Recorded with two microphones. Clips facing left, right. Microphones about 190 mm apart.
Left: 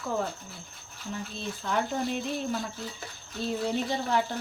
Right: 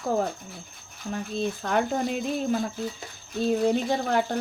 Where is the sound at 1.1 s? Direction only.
55° right (ahead or behind).